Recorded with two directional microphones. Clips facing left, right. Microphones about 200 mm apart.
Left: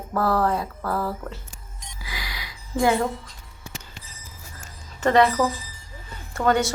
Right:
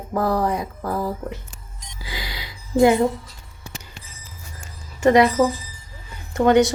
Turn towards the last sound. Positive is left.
turn(degrees=-20)  # may be behind; listen again after turning